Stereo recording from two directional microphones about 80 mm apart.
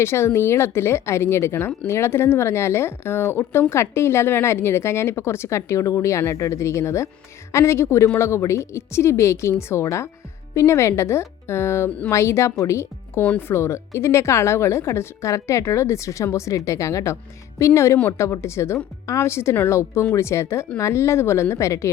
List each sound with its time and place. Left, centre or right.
0.0 s a woman's voice: left